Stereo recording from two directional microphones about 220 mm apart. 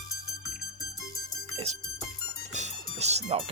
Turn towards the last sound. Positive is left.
turn(degrees=-30)  # may be behind; listen again after turning